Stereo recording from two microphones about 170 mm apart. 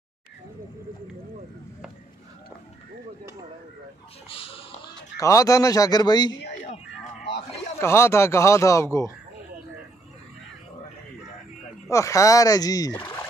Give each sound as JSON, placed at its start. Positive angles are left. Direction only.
{"t": 4.3, "sound": "a sound", "side_deg": 35}
{"t": 5.2, "sound": "speech", "side_deg": 20}
{"t": 7.8, "sound": "speech", "side_deg": 15}
{"t": 11.9, "sound": "speech", "side_deg": 20}